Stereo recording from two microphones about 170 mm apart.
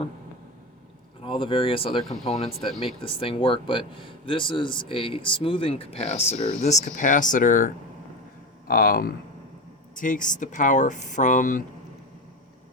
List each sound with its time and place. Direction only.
1.2 s speech: 30° left (ahead or behind); by 11.6 s 50° left (ahead or behind)